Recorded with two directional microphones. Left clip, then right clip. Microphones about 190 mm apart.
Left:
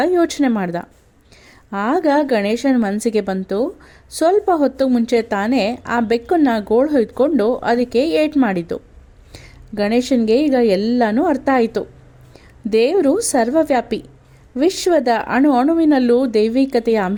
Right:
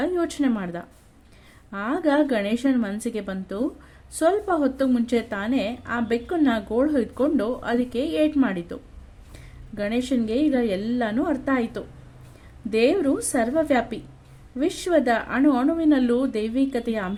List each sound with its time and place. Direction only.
0.0 s a woman's voice: 40° left (ahead or behind)